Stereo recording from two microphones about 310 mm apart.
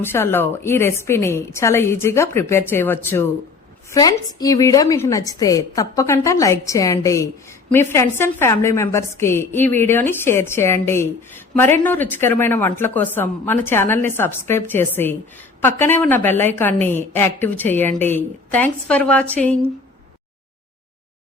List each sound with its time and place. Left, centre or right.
0.0 s a woman's voice: centre